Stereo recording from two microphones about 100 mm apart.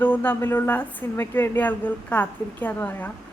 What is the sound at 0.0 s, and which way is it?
A woman's voice, 20° left (ahead or behind).